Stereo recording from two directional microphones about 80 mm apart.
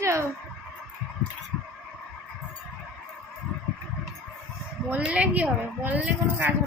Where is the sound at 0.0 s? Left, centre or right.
Right.